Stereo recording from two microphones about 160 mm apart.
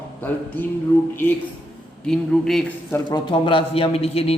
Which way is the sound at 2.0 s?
5° left (ahead or behind).